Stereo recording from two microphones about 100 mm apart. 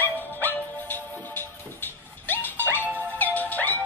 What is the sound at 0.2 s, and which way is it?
Music, 20° left (ahead or behind).